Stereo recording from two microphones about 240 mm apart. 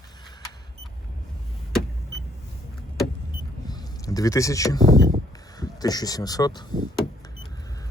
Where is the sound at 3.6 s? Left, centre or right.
Centre.